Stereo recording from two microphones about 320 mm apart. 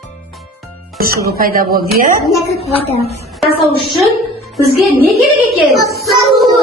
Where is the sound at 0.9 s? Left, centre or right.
Right.